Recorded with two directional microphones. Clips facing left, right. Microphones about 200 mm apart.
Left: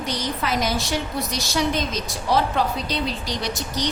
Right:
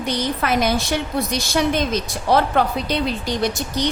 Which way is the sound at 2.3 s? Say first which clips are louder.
Right 4 dB; 55° right (ahead or behind).